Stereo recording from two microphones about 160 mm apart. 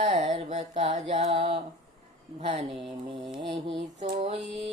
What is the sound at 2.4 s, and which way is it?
Speech, 40° right (ahead or behind).